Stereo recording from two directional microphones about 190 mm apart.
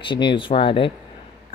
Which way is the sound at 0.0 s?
25° left (ahead or behind).